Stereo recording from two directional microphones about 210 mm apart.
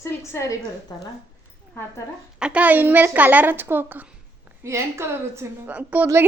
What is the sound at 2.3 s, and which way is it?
A woman's voice, 5° right (ahead or behind).